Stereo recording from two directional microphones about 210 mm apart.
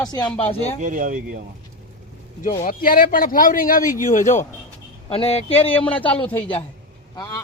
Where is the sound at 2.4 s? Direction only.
40° left (ahead or behind).